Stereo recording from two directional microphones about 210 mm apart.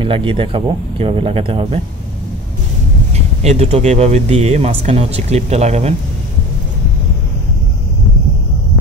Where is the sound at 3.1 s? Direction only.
30° right (ahead or behind).